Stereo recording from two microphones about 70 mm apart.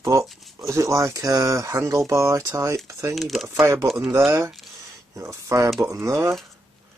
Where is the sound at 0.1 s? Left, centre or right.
Right.